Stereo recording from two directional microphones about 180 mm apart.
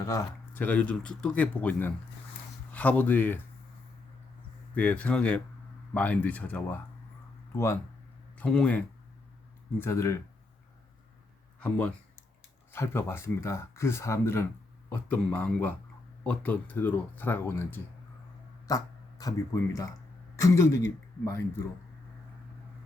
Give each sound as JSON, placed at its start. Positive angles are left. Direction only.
{"t": 0.0, "sound": "speech", "side_deg": 15}
{"t": 4.7, "sound": "speech", "side_deg": 10}
{"t": 11.6, "sound": "speech", "side_deg": 5}
{"t": 20.4, "sound": "speech", "side_deg": 15}